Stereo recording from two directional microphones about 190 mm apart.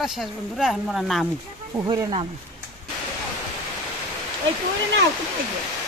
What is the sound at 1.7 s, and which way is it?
Speech, 15° right (ahead or behind).